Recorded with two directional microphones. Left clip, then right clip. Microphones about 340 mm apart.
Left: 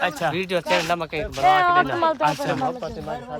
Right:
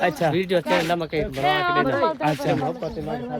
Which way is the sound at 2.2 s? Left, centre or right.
Centre.